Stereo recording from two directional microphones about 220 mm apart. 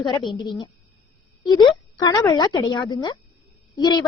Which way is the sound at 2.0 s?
15° left (ahead or behind).